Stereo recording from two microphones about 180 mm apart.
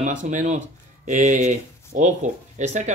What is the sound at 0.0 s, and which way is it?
Speech, 45° right (ahead or behind).